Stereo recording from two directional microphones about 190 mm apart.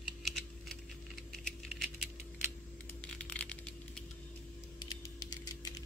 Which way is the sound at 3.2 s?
5° left (ahead or behind).